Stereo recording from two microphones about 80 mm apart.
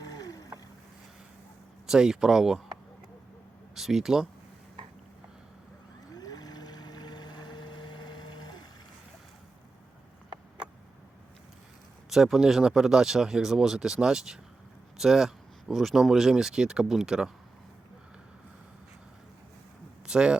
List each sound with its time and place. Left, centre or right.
0.0 s boat: left
1.9 s speech: centre
3.8 s speech: centre
6.1 s boat: left
12.1 s speech: centre
20.1 s speech: centre